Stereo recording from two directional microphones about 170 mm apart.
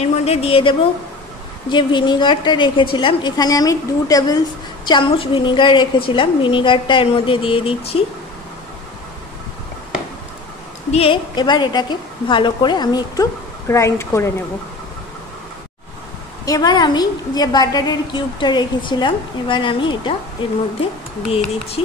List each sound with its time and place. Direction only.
0.2 s a woman's voice: 35° left (ahead or behind)
10.9 s a woman's voice: 35° left (ahead or behind); by 14.3 s 15° left (ahead or behind)
16.4 s a woman's voice: 20° left (ahead or behind)
21.8 s speech: 35° left (ahead or behind)